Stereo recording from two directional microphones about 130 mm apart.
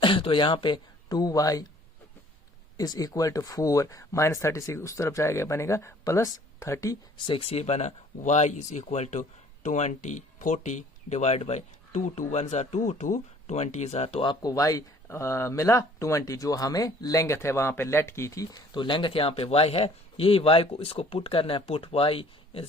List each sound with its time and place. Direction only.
0.0 s speech: 40° left (ahead or behind)
2.7 s speech: 30° left (ahead or behind)
7.3 s speech: 50° left (ahead or behind)
14.3 s speech: 25° left (ahead or behind); by 22.6 s 45° left (ahead or behind)